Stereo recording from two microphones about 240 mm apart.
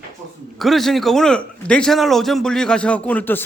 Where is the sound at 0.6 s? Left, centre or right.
Centre.